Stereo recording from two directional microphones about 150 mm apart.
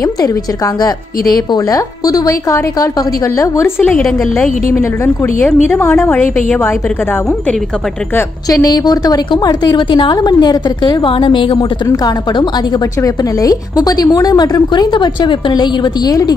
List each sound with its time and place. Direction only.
1.3 s a woman's voice: 25° left (ahead or behind)
3.8 s a woman's voice: 10° left (ahead or behind)
8.5 s a woman's voice: 25° left (ahead or behind)